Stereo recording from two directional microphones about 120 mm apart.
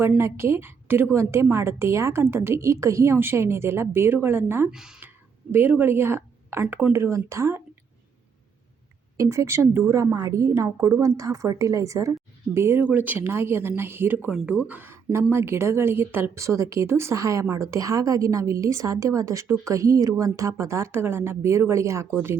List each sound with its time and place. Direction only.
0.2 s a woman's voice: 20° right (ahead or behind)
4.7 s speech: 5° right (ahead or behind)
5.5 s a woman's voice: 15° right (ahead or behind)
9.1 s a woman's voice: 25° right (ahead or behind)